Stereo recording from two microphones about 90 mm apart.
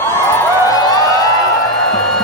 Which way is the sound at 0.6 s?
45° left (ahead or behind).